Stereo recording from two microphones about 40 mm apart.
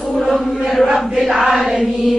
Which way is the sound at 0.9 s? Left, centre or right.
Centre.